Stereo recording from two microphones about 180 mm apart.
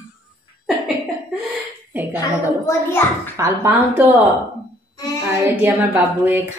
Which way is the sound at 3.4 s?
15° right (ahead or behind).